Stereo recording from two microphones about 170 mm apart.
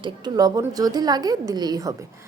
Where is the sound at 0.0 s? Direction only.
25° right (ahead or behind).